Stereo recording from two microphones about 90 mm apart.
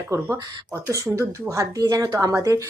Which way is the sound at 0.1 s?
30° right (ahead or behind).